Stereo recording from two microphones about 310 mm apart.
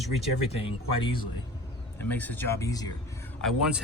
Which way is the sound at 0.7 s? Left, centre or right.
Centre.